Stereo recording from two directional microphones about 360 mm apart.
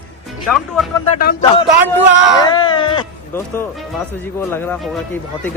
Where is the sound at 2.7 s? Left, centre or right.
Centre.